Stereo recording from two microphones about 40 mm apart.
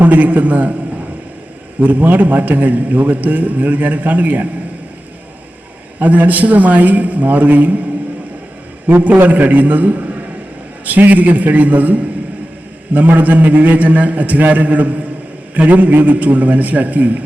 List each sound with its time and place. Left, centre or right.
0.0 s a man's voice: right
1.8 s a man's voice: right
6.0 s a man's voice: right
8.9 s a man's voice: right